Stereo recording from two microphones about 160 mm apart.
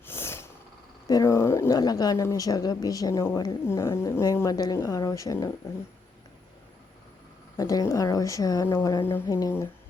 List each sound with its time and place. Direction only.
0.0 s a sound: 15° left (ahead or behind)
1.0 s speech: 20° left (ahead or behind)
7.5 s speech: 20° left (ahead or behind)